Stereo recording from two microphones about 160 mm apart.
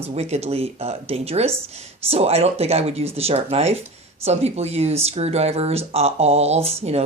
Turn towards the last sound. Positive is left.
turn(degrees=-40)  # may be behind; listen again after turning